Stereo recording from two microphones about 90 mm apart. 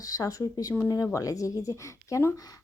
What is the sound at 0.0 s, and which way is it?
A woman's voice, 40° left (ahead or behind).